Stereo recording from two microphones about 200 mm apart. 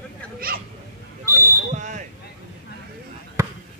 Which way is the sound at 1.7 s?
35° right (ahead or behind).